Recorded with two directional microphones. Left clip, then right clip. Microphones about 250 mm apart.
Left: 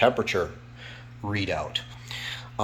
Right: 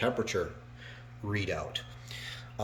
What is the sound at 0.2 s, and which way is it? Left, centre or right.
Speech, centre.